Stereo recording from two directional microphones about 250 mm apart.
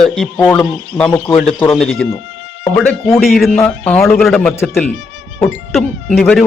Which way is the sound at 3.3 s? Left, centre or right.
Centre.